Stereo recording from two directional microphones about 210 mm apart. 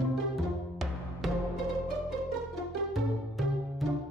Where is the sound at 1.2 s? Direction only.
Centre (ahead or behind).